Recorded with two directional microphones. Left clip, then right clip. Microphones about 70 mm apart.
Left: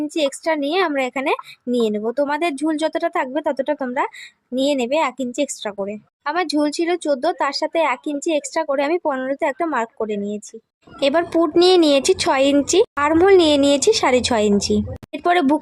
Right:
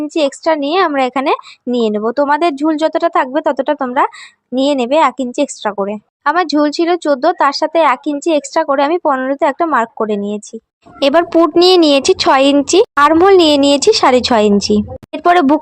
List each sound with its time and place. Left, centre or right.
0.1 s a woman's voice: right
4.5 s a woman's voice: right